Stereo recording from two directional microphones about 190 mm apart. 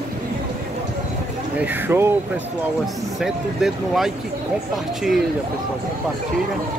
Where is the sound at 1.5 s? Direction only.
10° right (ahead or behind).